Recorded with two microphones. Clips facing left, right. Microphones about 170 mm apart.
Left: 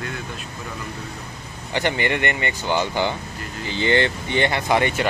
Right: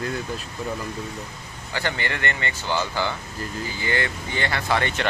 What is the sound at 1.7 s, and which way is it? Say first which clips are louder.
Speech: left 6 dB; 20° left (ahead or behind).